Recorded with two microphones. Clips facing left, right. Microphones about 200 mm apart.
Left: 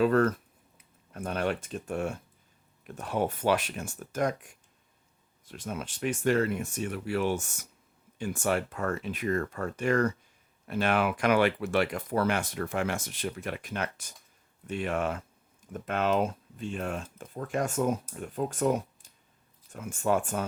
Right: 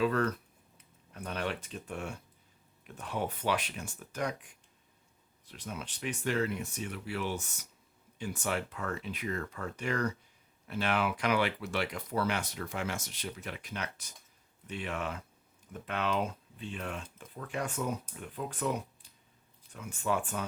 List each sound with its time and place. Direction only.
0.0 s speech: 45° left (ahead or behind)